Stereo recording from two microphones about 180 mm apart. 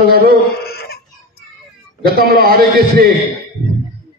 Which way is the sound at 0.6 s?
60° left (ahead or behind).